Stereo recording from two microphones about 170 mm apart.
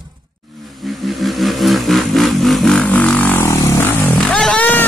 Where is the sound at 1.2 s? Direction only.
Centre (ahead or behind).